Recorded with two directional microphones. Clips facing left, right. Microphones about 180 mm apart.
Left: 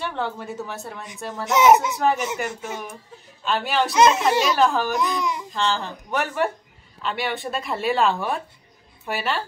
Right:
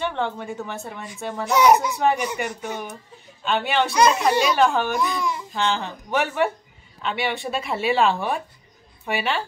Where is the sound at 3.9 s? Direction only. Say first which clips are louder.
Left 2 dB; 25° left (ahead or behind).